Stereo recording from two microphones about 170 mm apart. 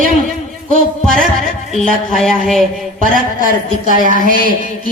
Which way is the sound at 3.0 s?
55° right (ahead or behind).